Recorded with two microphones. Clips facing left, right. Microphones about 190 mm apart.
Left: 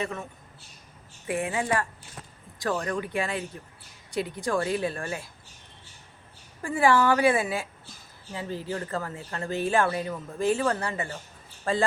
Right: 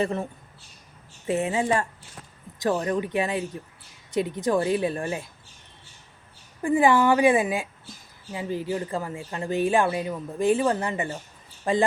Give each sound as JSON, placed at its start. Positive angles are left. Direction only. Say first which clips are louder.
{"t": 0.0, "sound": "speech", "louder": "right 6 dB", "side_deg": -35}
{"t": 1.3, "sound": "speech", "louder": "right 4 dB", "side_deg": -25}
{"t": 6.6, "sound": "speech", "louder": "right 3 dB", "side_deg": -20}